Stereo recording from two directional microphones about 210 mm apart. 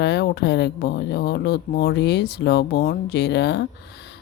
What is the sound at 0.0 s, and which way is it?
Speech, 55° left (ahead or behind).